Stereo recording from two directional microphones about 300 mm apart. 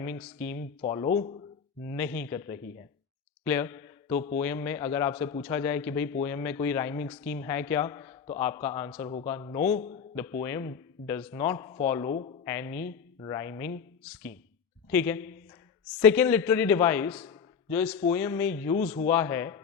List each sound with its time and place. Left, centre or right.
0.0 s speech: centre
0.5 s speech: left
2.0 s a man's voice: centre; by 9.9 s left
10.4 s a man's voice: centre
14.8 s a man's voice: centre
18.8 s speech: left
19.0 s a man's voice: centre